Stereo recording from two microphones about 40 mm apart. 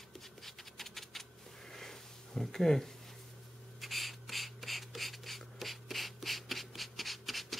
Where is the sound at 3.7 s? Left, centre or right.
Centre.